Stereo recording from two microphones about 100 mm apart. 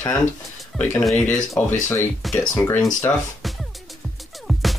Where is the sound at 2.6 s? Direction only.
25° left (ahead or behind).